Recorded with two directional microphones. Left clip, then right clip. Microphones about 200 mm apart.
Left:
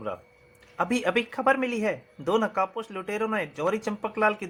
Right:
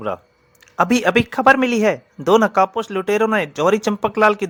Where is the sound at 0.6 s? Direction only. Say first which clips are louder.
Right 10 dB; 50° right (ahead or behind).